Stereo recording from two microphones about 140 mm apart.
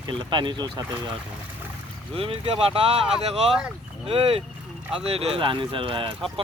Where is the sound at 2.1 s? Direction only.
40° right (ahead or behind).